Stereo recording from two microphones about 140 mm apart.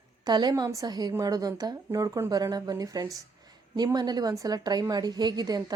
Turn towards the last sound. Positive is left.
turn(degrees=-30)  # may be behind; listen again after turning